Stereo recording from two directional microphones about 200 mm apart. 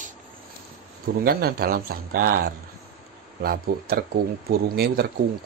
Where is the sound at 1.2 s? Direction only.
50° right (ahead or behind).